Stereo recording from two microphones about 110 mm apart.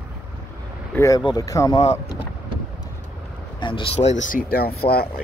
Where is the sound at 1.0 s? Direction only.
35° left (ahead or behind).